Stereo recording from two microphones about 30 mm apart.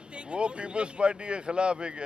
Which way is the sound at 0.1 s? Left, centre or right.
Right.